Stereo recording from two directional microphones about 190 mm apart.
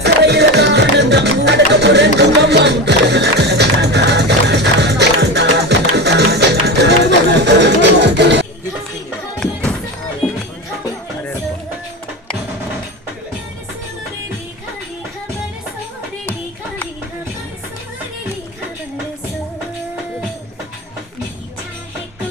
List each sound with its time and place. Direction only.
0.0 s music: 60° right (ahead or behind)
9.4 s music: 5° left (ahead or behind)